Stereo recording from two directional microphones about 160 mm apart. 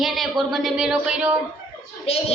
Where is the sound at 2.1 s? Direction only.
40° left (ahead or behind).